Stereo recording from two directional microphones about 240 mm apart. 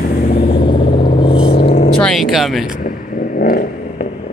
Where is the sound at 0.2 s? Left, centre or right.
Left.